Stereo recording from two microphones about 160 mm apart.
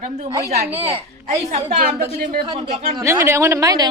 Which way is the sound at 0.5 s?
35° right (ahead or behind).